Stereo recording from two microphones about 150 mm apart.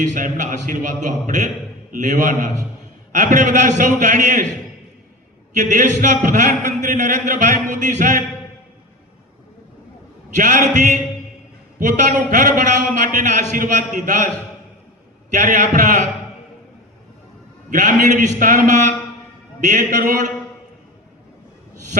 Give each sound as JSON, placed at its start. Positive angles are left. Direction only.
{"t": 0.1, "sound": "a man's voice", "side_deg": -55}
{"t": 5.5, "sound": "a man's voice", "side_deg": -60}
{"t": 10.3, "sound": "a man's voice", "side_deg": -60}
{"t": 15.3, "sound": "a man's voice", "side_deg": -55}
{"t": 17.7, "sound": "a man's voice", "side_deg": -55}